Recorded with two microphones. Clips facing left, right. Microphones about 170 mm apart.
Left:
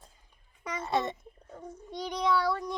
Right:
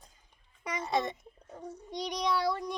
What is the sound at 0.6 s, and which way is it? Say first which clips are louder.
Speech: even; 15° right (ahead or behind).